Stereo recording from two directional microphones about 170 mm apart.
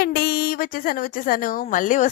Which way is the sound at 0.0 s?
65° left (ahead or behind).